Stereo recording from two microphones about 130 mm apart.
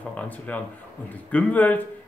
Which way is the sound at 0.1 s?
10° left (ahead or behind).